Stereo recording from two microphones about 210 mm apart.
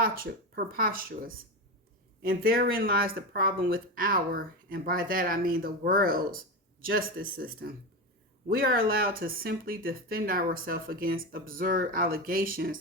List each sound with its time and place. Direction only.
0.0 s speech: 45° right (ahead or behind)